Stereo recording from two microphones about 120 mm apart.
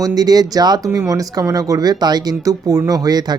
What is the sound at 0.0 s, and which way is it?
Speech, 30° right (ahead or behind).